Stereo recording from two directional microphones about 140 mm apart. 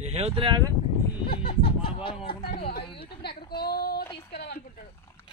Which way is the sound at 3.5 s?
90° left.